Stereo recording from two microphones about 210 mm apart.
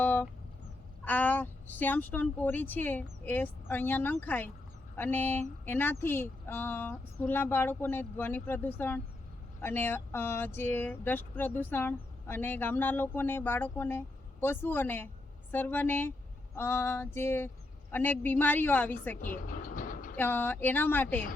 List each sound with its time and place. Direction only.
0.0 s vehicle: 10° left (ahead or behind)
1.0 s speech: 10° left (ahead or behind)
19.5 s train: 40° left (ahead or behind)
20.1 s speech: 10° left (ahead or behind)